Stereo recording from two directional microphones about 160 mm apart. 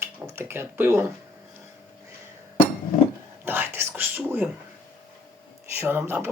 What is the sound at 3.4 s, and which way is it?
Whispering, 15° right (ahead or behind).